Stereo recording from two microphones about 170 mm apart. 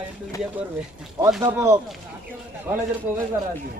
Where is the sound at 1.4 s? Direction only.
15° right (ahead or behind).